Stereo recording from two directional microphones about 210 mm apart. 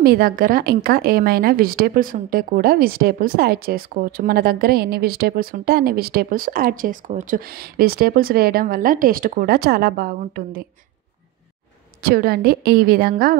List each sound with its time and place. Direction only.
0.0 s a woman's voice: 45° right (ahead or behind)
12.0 s a woman's voice: 45° right (ahead or behind)